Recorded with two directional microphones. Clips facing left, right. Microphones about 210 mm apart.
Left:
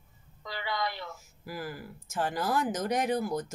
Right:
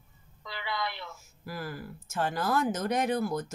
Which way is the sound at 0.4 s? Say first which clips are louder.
Left 2 dB; 40° left (ahead or behind).